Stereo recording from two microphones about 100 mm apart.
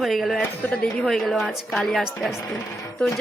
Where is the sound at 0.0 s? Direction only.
Centre (ahead or behind).